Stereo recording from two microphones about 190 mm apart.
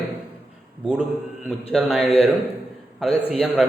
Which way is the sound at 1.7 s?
Centre (ahead or behind).